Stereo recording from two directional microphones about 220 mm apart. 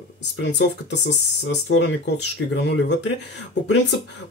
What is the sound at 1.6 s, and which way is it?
Speech, 55° left (ahead or behind).